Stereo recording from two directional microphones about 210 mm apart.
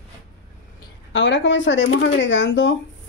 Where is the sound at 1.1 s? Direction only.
60° left (ahead or behind).